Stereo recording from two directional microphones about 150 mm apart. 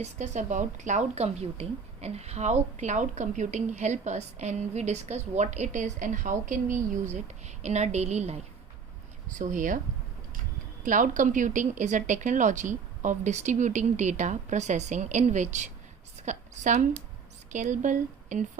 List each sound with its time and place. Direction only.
0.0 s a woman's voice: 55° right (ahead or behind)
9.4 s speech: 60° right (ahead or behind)
10.8 s speech: 60° right (ahead or behind)